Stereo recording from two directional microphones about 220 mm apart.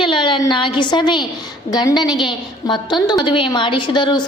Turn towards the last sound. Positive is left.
turn(degrees=20)  # may be behind; listen again after turning